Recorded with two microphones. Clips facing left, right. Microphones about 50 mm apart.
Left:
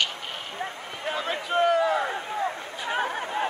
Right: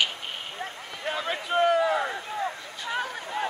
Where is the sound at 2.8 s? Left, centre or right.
Left.